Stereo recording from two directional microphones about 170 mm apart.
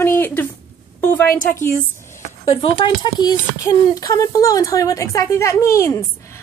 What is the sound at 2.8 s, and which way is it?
A woman's voice, 25° left (ahead or behind).